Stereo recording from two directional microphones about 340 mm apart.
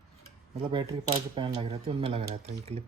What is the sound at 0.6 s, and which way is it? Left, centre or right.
Speech, centre.